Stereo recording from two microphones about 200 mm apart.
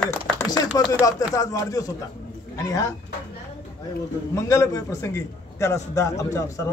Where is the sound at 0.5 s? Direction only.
20° left (ahead or behind).